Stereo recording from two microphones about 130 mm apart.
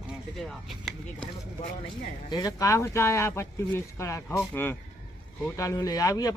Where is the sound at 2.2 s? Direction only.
30° left (ahead or behind).